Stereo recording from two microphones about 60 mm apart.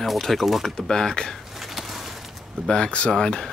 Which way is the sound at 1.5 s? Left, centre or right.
Centre.